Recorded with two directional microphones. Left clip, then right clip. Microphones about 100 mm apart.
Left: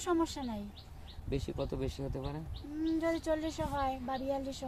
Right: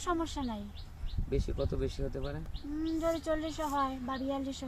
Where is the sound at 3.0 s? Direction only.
60° left (ahead or behind).